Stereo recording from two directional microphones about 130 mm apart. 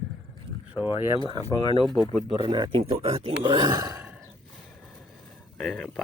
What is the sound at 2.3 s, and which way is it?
Speech, 35° right (ahead or behind).